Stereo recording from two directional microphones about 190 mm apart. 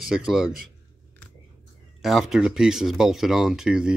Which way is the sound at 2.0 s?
Centre (ahead or behind).